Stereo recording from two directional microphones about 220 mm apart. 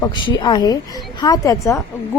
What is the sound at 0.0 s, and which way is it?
A woman's voice, 20° left (ahead or behind).